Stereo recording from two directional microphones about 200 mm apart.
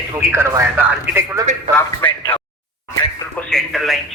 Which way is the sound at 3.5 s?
Centre (ahead or behind).